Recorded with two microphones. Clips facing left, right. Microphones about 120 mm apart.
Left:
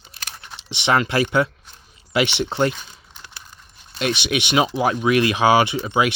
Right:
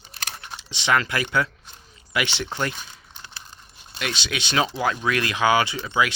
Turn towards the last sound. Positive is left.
turn(degrees=25)  # may be behind; listen again after turning